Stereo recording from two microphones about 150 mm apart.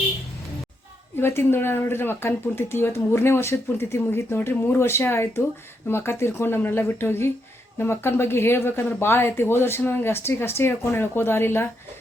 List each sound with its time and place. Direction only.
1.1 s speech: 15° left (ahead or behind)